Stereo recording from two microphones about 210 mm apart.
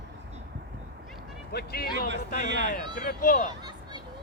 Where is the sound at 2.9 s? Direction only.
40° left (ahead or behind).